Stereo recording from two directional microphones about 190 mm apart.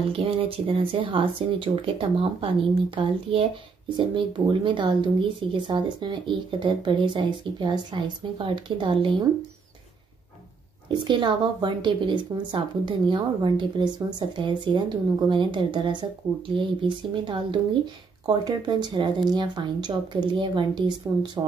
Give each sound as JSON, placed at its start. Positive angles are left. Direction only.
{"t": 0.1, "sound": "a woman's voice", "side_deg": -30}
{"t": 10.9, "sound": "a woman's voice", "side_deg": -25}